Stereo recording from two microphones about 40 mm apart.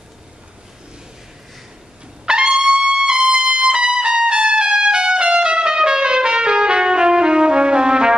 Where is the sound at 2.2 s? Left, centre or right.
Right.